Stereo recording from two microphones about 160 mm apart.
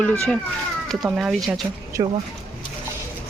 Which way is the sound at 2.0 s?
30° right (ahead or behind).